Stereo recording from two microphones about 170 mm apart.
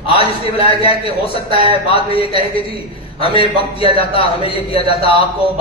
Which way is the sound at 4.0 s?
30° left (ahead or behind).